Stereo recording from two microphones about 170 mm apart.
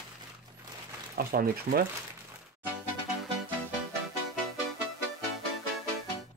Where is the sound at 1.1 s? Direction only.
60° right (ahead or behind).